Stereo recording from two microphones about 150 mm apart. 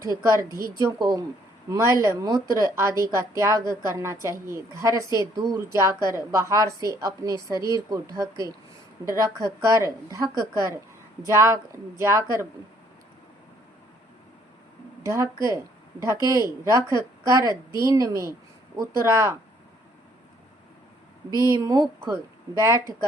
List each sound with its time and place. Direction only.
0.0 s a woman's voice: 20° right (ahead or behind)
15.0 s a woman's voice: 20° right (ahead or behind)
21.5 s a woman's voice: 25° right (ahead or behind)